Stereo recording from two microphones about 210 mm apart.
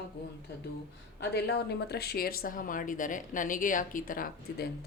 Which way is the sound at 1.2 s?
50° left (ahead or behind).